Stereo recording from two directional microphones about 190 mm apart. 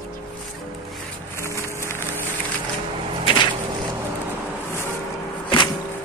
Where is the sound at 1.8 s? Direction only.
10° left (ahead or behind).